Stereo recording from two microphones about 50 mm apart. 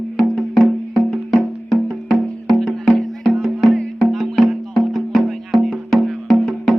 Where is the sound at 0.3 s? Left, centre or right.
Centre.